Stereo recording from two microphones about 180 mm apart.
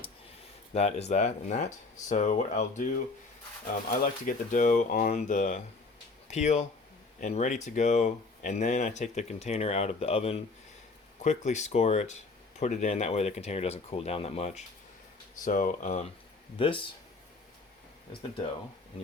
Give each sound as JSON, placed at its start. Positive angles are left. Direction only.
{"t": 0.7, "sound": "speech", "side_deg": 35}
{"t": 4.3, "sound": "speech", "side_deg": 45}
{"t": 16.6, "sound": "speech", "side_deg": 30}